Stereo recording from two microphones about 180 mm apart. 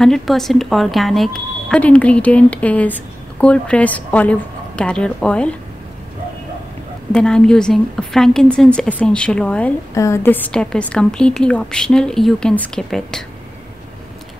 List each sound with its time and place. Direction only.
0.0 s a woman's voice: centre (ahead or behind)
7.1 s a woman's voice: 5° left (ahead or behind)